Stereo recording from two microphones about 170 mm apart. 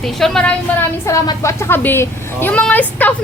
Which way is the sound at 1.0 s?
20° left (ahead or behind).